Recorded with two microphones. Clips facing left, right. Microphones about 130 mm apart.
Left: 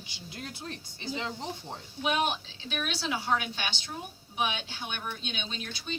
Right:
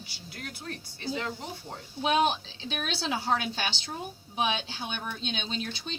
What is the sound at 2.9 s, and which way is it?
A woman's voice, 30° right (ahead or behind).